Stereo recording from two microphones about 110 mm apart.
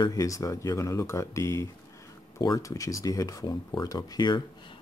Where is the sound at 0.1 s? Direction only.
30° left (ahead or behind).